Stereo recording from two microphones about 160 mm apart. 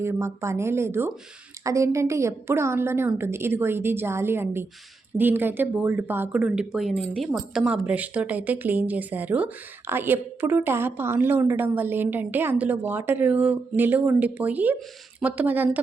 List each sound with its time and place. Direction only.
0.0 s speech: 15° right (ahead or behind)